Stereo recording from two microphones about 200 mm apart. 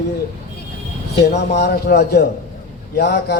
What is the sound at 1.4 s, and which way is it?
A man's voice, 55° left (ahead or behind).